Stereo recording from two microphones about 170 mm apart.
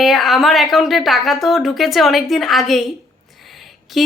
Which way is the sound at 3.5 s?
Centre (ahead or behind).